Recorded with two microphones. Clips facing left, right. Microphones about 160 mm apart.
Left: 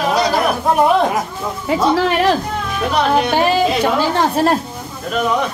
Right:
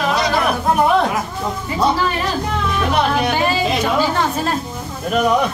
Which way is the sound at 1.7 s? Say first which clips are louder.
Left 4 dB; 85° left.